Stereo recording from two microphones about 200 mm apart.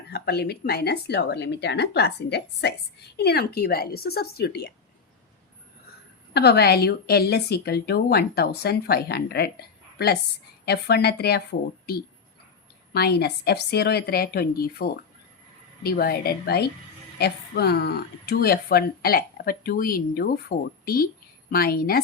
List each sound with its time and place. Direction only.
0.1 s a woman's voice: 55° left (ahead or behind)
6.3 s a woman's voice: 55° left (ahead or behind)
12.9 s a woman's voice: 55° left (ahead or behind)